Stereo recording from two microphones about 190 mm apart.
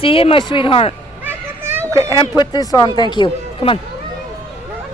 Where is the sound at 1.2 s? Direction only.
10° right (ahead or behind).